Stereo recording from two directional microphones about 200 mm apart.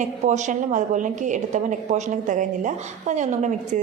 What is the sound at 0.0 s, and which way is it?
A woman's voice, 35° right (ahead or behind).